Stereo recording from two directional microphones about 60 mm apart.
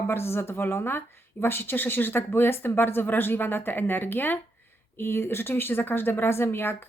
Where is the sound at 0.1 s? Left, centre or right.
Left.